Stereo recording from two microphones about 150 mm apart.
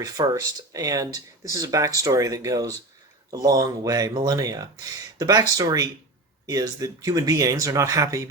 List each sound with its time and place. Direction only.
0.0 s speech: 25° right (ahead or behind)